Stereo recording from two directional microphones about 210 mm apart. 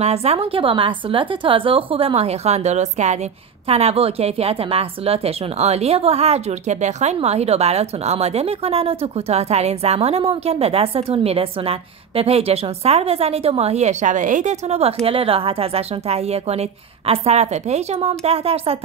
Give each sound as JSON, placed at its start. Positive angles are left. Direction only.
{"t": 0.0, "sound": "a woman's voice", "side_deg": -30}